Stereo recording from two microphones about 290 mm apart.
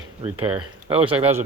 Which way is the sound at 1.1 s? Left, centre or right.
Centre.